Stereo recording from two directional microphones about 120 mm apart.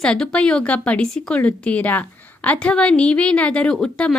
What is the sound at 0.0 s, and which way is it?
A woman's voice, 5° left (ahead or behind).